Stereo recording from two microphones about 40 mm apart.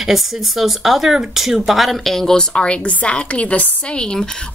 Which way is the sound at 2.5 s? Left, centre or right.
Left.